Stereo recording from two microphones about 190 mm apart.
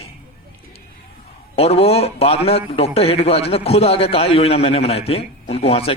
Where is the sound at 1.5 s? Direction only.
30° left (ahead or behind).